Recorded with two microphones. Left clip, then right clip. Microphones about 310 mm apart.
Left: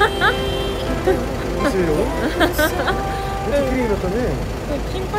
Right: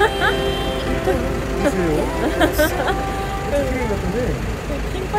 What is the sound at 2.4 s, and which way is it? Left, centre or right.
Speech, centre.